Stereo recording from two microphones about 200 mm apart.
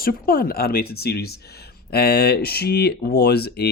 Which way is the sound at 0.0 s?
45° left (ahead or behind).